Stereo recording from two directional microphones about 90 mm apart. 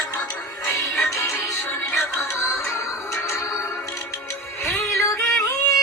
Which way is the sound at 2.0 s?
35° left (ahead or behind).